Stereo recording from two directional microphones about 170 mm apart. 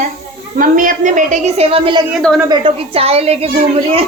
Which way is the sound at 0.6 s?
50° right (ahead or behind).